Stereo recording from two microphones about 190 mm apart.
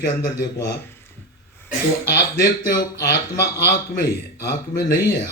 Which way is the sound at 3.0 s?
60° left (ahead or behind).